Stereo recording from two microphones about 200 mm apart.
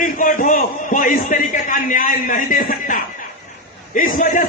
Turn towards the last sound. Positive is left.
turn(degrees=40)  # may be behind; listen again after turning